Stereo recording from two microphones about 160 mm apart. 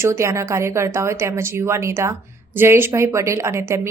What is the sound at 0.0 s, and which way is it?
A woman's voice, 15° right (ahead or behind).